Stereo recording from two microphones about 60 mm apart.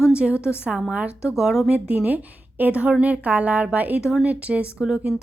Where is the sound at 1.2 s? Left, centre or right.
Centre.